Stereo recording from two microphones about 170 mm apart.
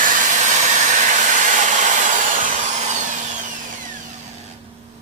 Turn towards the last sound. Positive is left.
turn(degrees=-45)  # may be behind; listen again after turning